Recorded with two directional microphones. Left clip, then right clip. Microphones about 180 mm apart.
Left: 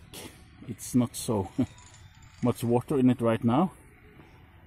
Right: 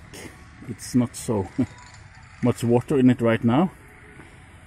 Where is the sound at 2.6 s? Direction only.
10° left (ahead or behind).